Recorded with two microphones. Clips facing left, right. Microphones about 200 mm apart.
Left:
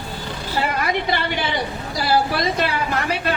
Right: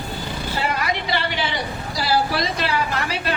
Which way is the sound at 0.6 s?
55° left (ahead or behind).